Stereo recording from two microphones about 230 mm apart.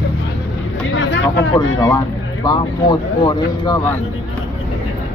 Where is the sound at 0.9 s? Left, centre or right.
Left.